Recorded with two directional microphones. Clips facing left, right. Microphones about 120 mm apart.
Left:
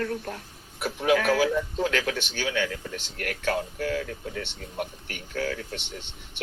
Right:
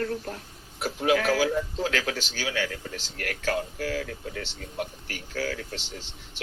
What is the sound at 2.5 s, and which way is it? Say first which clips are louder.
Speech: left 1 dB; 45° right (ahead or behind).